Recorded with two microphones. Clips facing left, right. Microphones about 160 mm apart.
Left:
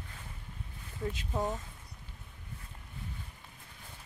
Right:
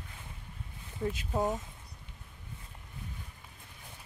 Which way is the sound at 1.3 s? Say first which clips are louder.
Right 3 dB; 15° right (ahead or behind).